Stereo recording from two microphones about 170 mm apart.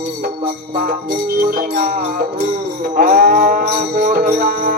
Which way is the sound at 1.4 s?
55° right (ahead or behind).